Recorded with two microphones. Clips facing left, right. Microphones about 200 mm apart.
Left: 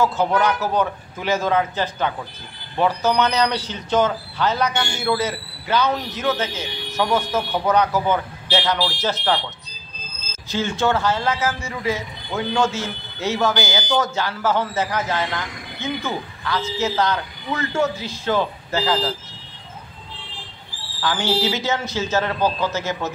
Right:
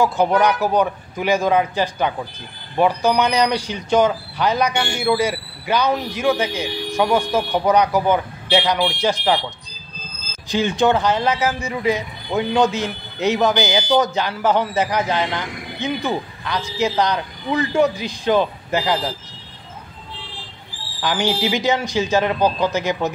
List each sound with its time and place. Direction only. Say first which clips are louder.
0.0 s speech: right 3 dB; 15° right (ahead or behind)
10.5 s speech: right 4 dB; 15° right (ahead or behind)
21.0 s speech: right 1 dB; 15° right (ahead or behind)